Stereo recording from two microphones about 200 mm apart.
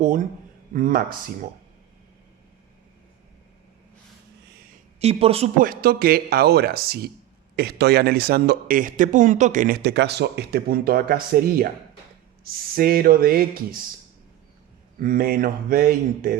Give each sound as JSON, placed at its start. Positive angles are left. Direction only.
{"t": 0.0, "sound": "a man's voice", "side_deg": -40}
{"t": 4.9, "sound": "speech", "side_deg": -30}
{"t": 5.5, "sound": "a man's voice", "side_deg": -45}
{"t": 14.9, "sound": "a man's voice", "side_deg": -45}